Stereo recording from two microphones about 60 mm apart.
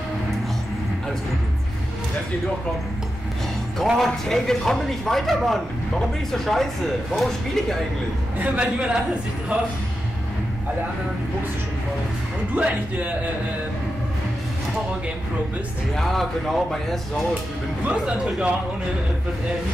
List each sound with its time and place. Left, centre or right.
3.8 s speech: centre
4.3 s speech: centre
8.4 s speech: centre
12.5 s speech: right
16.0 s speech: centre
17.8 s speech: centre